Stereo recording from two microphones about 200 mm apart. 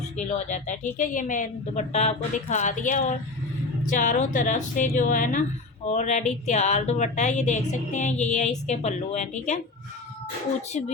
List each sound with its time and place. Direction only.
0.2 s speech: 35° left (ahead or behind)
10.7 s speech: 35° left (ahead or behind)